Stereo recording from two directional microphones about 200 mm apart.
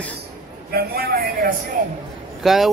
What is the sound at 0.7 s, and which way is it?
Speech, 50° right (ahead or behind).